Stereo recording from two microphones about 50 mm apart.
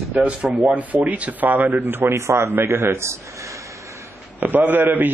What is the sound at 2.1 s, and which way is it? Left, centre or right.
Speech, right.